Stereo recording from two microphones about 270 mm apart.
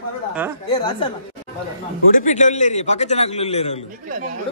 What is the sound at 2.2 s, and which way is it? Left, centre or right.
A man's voice, left.